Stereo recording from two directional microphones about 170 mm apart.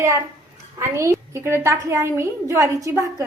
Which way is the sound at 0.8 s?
15° right (ahead or behind).